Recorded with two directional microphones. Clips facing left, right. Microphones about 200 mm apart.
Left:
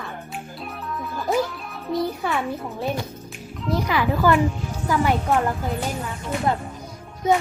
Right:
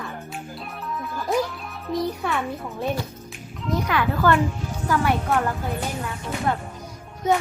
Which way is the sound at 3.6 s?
10° left (ahead or behind).